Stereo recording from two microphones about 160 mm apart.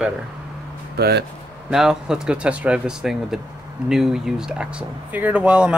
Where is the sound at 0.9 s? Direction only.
90° right.